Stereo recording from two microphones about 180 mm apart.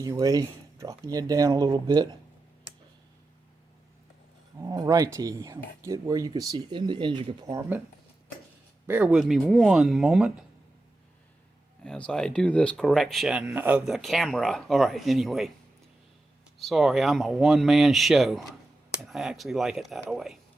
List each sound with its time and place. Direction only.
0.0 s speech: 20° right (ahead or behind)
4.6 s speech: 20° right (ahead or behind)
8.9 s speech: 10° right (ahead or behind)
11.8 s speech: 5° left (ahead or behind)
16.6 s speech: centre (ahead or behind)